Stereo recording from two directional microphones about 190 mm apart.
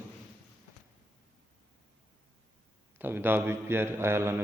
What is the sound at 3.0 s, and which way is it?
A man's voice, 10° right (ahead or behind).